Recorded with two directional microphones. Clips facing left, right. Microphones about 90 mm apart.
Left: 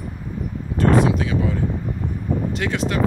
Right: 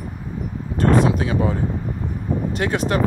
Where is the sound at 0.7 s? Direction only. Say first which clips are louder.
Even; 40° right (ahead or behind).